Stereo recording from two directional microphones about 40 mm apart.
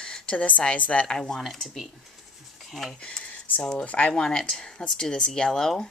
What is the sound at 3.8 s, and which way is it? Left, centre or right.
Speech, left.